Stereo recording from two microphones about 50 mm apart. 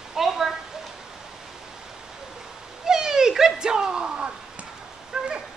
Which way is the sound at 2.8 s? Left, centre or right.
Centre.